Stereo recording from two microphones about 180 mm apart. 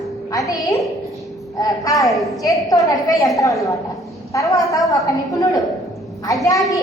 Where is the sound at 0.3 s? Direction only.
20° left (ahead or behind).